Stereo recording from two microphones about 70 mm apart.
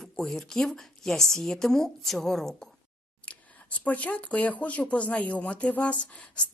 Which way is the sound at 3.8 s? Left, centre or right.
Left.